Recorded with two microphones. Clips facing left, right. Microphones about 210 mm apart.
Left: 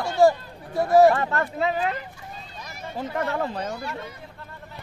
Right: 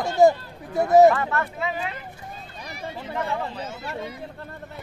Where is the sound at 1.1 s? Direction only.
35° left (ahead or behind).